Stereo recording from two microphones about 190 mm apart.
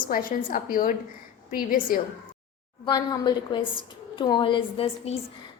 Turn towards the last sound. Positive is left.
turn(degrees=30)  # may be behind; listen again after turning